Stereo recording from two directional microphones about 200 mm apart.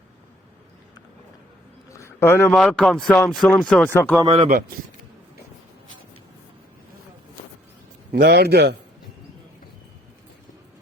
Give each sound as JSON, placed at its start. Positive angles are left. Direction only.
{"t": 1.9, "sound": "a sound", "side_deg": 15}
{"t": 2.6, "sound": "speech", "side_deg": 0}
{"t": 4.2, "sound": "speech", "side_deg": -20}
{"t": 4.4, "sound": "a man's voice", "side_deg": -45}
{"t": 8.1, "sound": "a man's voice", "side_deg": -50}